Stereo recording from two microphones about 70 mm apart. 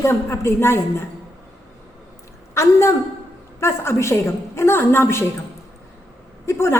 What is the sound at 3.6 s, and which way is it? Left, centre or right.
A woman's voice, left.